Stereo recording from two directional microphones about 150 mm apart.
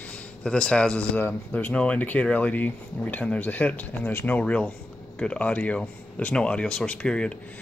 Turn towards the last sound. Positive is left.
turn(degrees=5)  # may be behind; listen again after turning